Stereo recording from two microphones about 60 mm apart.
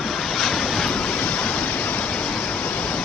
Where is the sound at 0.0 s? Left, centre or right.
Centre.